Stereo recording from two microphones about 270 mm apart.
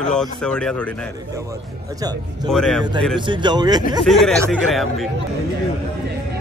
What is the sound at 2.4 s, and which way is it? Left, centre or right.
Speech, centre.